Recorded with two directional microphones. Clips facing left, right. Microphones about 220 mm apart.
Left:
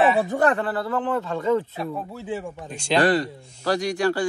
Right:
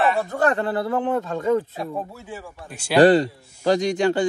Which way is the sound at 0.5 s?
25° right (ahead or behind).